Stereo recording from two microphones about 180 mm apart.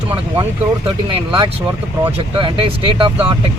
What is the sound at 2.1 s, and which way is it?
Speech, 30° right (ahead or behind).